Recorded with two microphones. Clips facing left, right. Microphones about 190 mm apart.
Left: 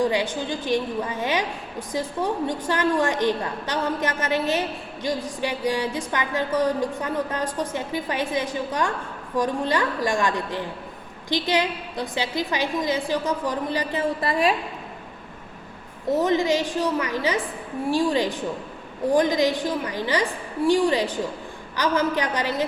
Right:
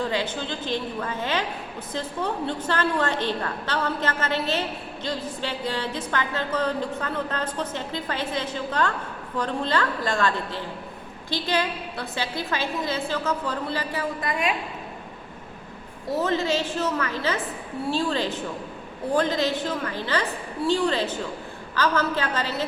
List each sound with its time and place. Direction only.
0.0 s a woman's voice: 15° left (ahead or behind); by 14.5 s 35° left (ahead or behind)
16.0 s a woman's voice: 15° left (ahead or behind)